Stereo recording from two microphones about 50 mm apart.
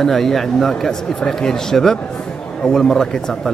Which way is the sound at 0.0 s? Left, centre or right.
Centre.